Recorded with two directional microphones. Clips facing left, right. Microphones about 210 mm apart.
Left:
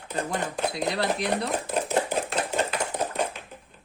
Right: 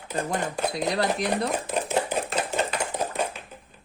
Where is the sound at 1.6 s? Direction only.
Centre (ahead or behind).